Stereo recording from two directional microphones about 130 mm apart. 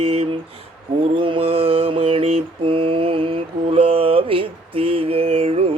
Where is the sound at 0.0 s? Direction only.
50° right (ahead or behind).